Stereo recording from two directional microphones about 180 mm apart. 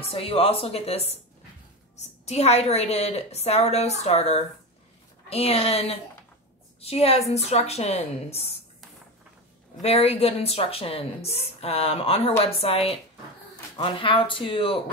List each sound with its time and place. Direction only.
0.0 s speech: 30° left (ahead or behind)
9.8 s speech: 35° left (ahead or behind)